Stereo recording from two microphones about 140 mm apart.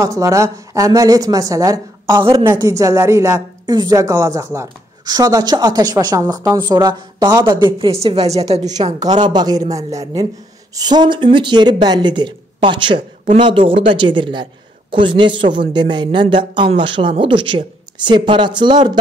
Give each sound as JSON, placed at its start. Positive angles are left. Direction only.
{"t": 0.0, "sound": "a woman's voice", "side_deg": -20}
{"t": 8.0, "sound": "a woman's voice", "side_deg": -45}
{"t": 9.0, "sound": "a woman's voice", "side_deg": -30}